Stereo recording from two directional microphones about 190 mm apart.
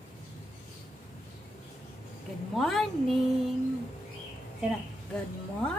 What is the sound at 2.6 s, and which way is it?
Speech, centre (ahead or behind).